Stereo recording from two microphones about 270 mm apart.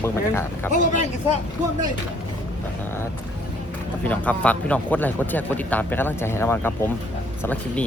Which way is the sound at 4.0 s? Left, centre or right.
Centre.